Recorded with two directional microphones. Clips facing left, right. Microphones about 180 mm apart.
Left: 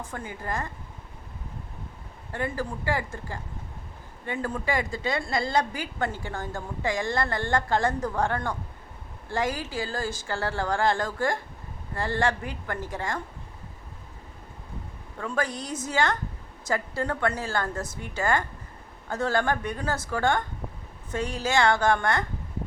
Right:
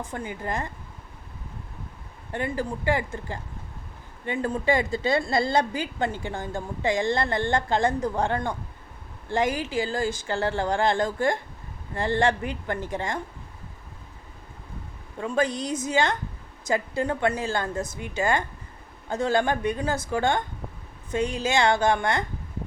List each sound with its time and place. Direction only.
0.0 s a woman's voice: 15° right (ahead or behind)
2.3 s a woman's voice: 20° right (ahead or behind)
15.2 s a woman's voice: 20° right (ahead or behind)